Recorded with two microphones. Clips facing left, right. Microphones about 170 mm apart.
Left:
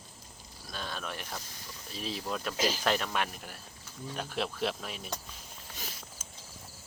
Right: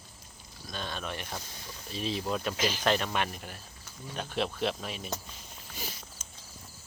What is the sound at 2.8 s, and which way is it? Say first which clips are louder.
Speech: right 2 dB; 5° left (ahead or behind).